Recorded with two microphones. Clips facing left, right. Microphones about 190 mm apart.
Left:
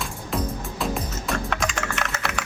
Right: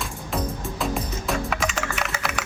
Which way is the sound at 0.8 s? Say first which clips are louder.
Even; centre (ahead or behind).